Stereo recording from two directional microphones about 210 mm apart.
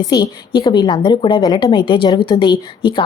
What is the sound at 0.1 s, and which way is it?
A woman's voice, 20° left (ahead or behind).